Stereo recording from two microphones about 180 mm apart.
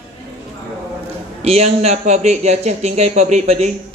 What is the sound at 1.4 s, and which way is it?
A man's voice, 35° right (ahead or behind).